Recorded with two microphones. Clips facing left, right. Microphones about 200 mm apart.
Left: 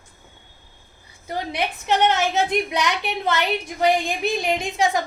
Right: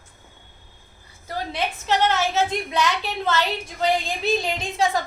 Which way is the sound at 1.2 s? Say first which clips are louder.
Left 1 dB; 20° left (ahead or behind).